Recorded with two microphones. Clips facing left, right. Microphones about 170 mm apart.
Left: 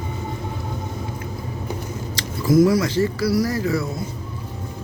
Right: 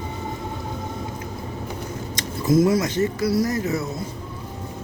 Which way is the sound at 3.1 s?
20° right (ahead or behind).